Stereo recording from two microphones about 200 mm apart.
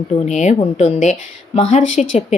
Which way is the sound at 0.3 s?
35° left (ahead or behind).